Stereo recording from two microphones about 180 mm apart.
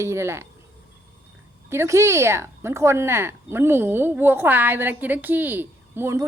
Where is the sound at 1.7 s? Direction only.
15° right (ahead or behind).